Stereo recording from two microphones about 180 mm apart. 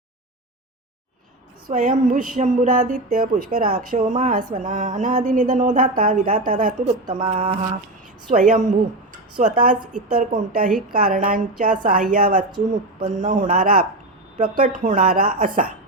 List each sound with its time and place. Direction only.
1.6 s speech: 50° right (ahead or behind)
7.2 s mantra: 35° right (ahead or behind)
8.3 s speech: 50° right (ahead or behind)
12.5 s speech: 25° right (ahead or behind)
13.1 s speech: 45° right (ahead or behind)